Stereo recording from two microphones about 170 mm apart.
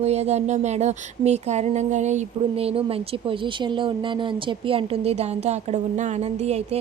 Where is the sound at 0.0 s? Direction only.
40° right (ahead or behind).